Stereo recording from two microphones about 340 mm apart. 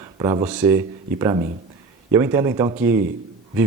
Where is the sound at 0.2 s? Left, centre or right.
Centre.